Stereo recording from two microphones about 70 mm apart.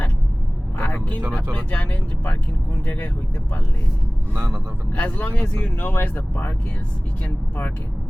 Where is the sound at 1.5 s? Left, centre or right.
Left.